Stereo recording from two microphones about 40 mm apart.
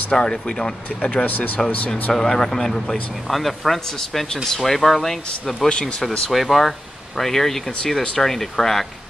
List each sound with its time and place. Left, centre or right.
0.1 s speech: left
1.2 s speech: left
2.1 s speech: centre
5.7 s speech: left
6.3 s speech: centre